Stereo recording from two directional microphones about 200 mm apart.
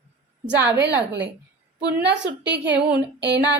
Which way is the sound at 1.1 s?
60° right (ahead or behind).